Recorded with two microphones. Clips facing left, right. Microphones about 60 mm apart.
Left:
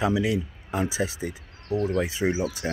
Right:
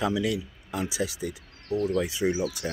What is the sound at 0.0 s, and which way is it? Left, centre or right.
Speech, left.